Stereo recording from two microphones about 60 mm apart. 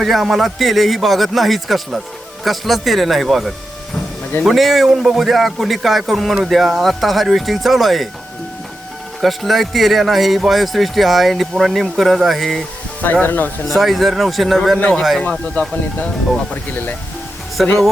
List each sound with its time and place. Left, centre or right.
0.0 s speech: centre
9.2 s speech: centre
13.2 s speech: left
13.7 s speech: centre
14.8 s speech: centre
17.6 s speech: centre